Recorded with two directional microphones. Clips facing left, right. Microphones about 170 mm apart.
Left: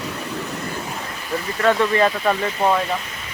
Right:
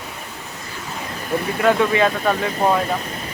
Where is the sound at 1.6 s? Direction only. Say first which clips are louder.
Even; 5° right (ahead or behind).